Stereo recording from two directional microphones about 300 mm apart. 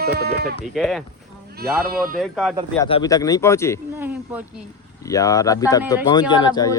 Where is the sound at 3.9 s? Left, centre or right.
Centre.